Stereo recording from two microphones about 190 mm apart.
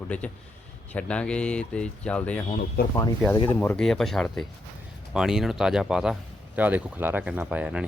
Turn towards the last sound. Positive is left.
turn(degrees=-5)  # may be behind; listen again after turning